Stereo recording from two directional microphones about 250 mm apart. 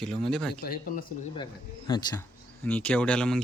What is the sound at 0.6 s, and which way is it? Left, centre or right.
Speech, left.